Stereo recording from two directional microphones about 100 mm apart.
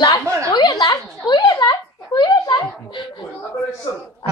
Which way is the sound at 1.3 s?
45° left (ahead or behind).